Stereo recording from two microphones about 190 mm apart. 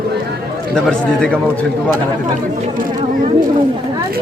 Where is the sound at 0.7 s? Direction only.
5° left (ahead or behind).